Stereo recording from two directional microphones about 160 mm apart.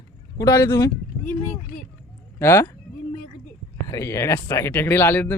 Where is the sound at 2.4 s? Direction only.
15° left (ahead or behind).